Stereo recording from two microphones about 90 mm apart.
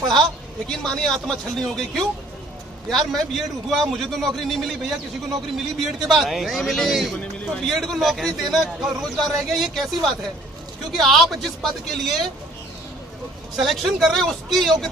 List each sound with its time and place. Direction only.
0.7 s a man's voice: 5° left (ahead or behind)
13.6 s a man's voice: centre (ahead or behind)